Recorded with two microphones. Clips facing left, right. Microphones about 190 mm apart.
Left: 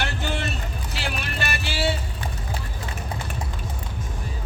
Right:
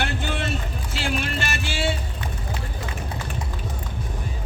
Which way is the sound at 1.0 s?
50° right (ahead or behind).